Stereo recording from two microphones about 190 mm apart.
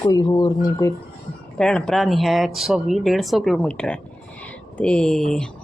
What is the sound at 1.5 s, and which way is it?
Speech, 5° left (ahead or behind).